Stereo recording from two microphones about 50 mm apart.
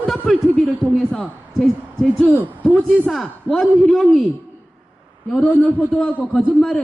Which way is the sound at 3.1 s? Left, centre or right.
Centre.